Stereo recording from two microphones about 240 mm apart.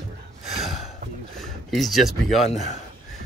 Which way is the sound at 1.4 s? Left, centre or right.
Centre.